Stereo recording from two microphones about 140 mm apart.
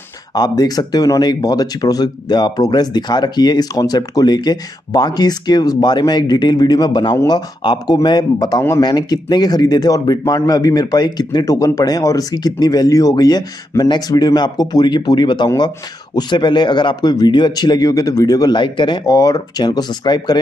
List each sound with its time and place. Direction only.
0.3 s speech: 30° left (ahead or behind)